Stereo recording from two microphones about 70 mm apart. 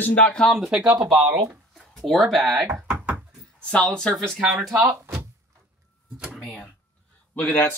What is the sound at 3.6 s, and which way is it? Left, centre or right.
Speech, centre.